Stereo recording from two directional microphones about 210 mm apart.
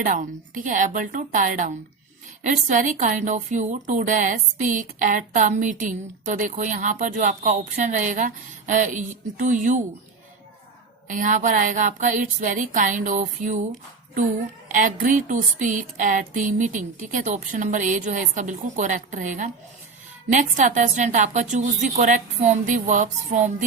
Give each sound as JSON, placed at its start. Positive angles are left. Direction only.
{"t": 0.0, "sound": "speech", "side_deg": -40}
{"t": 11.1, "sound": "speech", "side_deg": -35}
{"t": 14.7, "sound": "speech", "side_deg": -35}